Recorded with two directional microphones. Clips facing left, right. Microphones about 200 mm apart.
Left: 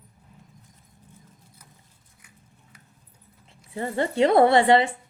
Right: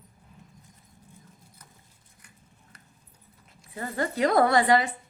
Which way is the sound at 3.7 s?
25° left (ahead or behind).